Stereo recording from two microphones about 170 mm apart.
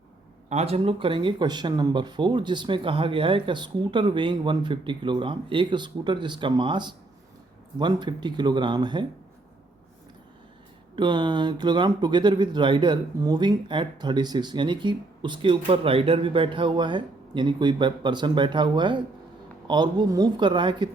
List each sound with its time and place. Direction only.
0.5 s speech: 35° right (ahead or behind)
10.9 s speech: 25° right (ahead or behind)